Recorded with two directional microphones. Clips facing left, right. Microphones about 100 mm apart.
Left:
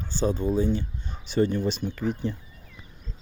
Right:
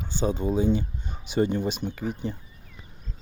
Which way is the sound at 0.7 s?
15° right (ahead or behind).